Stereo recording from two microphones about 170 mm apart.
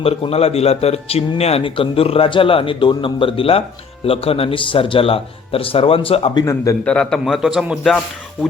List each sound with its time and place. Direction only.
0.0 s speech: 35° left (ahead or behind)
6.4 s a man's voice: 20° left (ahead or behind)
6.8 s a man's voice: 5° left (ahead or behind)